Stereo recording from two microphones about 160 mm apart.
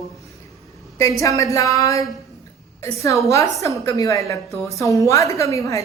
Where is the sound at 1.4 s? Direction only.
20° left (ahead or behind).